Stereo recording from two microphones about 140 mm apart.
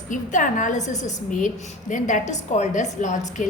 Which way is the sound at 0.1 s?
65° left (ahead or behind).